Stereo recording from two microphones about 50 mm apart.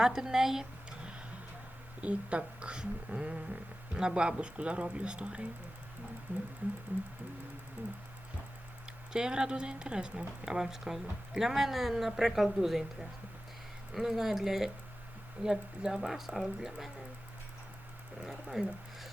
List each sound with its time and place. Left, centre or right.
0.0 s speech: centre
2.0 s speech: right
7.8 s speech: right
9.1 s speech: centre
18.2 s speech: centre